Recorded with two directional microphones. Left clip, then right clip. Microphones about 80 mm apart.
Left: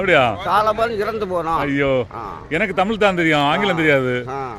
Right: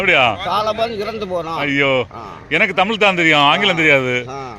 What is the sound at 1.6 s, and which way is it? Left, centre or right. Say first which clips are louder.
A man's voice: right 3 dB; left.